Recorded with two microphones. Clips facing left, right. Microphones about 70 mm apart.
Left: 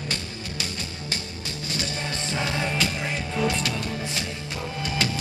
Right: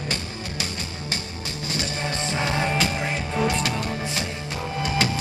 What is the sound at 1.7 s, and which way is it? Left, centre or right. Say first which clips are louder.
Music: right 3 dB; right.